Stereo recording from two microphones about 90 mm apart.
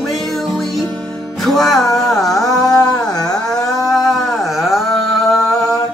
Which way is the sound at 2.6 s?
45° left (ahead or behind).